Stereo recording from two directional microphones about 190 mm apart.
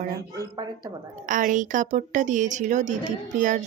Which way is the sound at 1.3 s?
40° right (ahead or behind).